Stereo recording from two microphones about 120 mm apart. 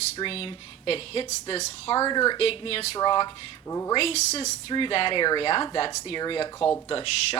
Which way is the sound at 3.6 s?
25° left (ahead or behind).